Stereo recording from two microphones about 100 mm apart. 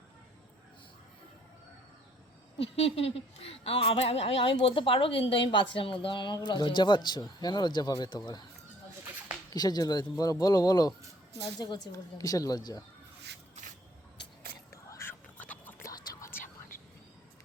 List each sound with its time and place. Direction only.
2.6 s a woman's voice: 75° left (ahead or behind); by 8.2 s 50° left (ahead or behind)
9.5 s speech: 40° left (ahead or behind)
14.8 s whispering: 30° left (ahead or behind)
15.4 s a sound: 15° left (ahead or behind)
15.8 s whispering: 30° left (ahead or behind)